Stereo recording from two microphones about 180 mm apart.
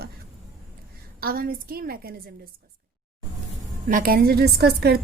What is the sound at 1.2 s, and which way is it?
Speech, 55° right (ahead or behind).